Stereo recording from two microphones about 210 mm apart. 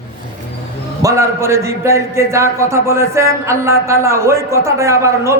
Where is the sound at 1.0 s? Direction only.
15° right (ahead or behind).